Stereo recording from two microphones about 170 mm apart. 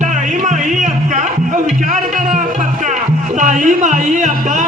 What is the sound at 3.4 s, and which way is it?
Music, 45° right (ahead or behind).